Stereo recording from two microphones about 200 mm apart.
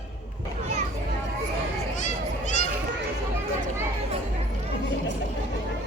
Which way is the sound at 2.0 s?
35° left (ahead or behind).